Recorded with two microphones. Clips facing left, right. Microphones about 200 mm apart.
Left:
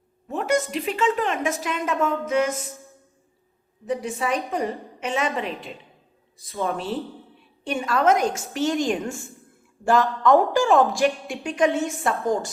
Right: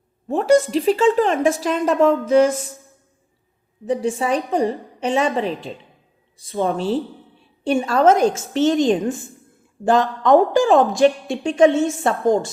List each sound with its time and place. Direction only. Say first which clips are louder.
0.3 s a woman's voice: right 8 dB; 30° right (ahead or behind)
3.8 s a woman's voice: right 5 dB; 30° right (ahead or behind)